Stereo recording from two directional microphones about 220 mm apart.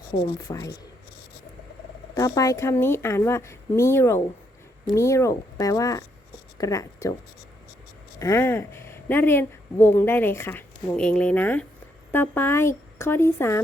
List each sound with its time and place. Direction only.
0.3 s a woman's voice: 15° left (ahead or behind)
2.1 s a woman's voice: 15° left (ahead or behind)
8.2 s a woman's voice: 10° left (ahead or behind)